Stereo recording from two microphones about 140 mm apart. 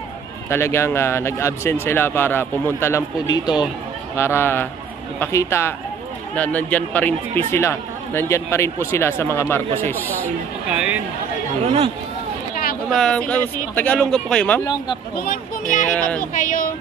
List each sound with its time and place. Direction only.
0.5 s speech: 20° left (ahead or behind)
4.2 s speech: 15° left (ahead or behind)
10.7 s speech: 5° right (ahead or behind)
11.6 s speech: 50° right (ahead or behind)
12.9 s speech: 5° left (ahead or behind)
15.1 s speech: 80° left
15.9 s speech: 10° left (ahead or behind)
16.3 s speech: 75° left (ahead or behind)